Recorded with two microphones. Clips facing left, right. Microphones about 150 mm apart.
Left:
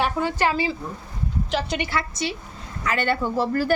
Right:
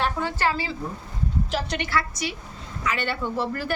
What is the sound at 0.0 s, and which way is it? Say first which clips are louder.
Speech: left 2 dB; 15° left (ahead or behind).